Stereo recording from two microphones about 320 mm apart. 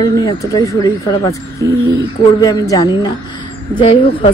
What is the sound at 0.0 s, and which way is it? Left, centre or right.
Speech, centre.